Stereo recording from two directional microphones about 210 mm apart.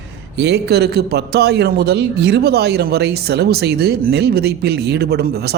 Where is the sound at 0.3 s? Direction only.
55° right (ahead or behind).